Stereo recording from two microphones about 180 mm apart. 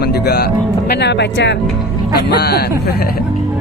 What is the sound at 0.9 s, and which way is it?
Speech, 70° left (ahead or behind).